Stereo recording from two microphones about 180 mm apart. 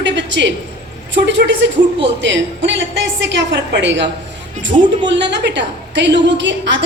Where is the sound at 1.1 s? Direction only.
85° right.